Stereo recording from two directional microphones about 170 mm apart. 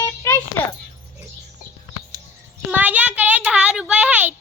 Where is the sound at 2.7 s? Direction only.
10° right (ahead or behind).